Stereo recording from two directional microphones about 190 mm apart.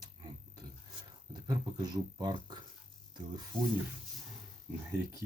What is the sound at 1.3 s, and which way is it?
Speech, 20° right (ahead or behind).